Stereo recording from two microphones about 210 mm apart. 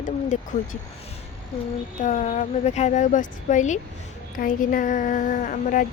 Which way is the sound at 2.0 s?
35° left (ahead or behind).